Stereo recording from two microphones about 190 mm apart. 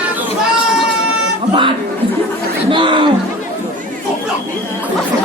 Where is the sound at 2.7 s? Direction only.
25° right (ahead or behind).